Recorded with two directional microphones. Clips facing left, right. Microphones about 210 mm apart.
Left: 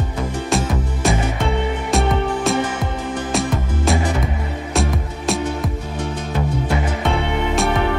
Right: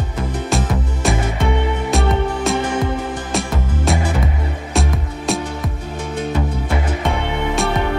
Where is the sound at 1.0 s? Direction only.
Centre (ahead or behind).